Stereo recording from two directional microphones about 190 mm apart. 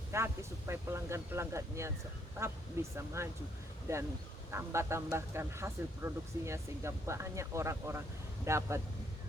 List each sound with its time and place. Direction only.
0.1 s speech: 15° right (ahead or behind)